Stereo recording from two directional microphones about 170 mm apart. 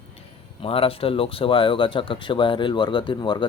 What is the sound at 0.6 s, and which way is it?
Speech, 35° left (ahead or behind).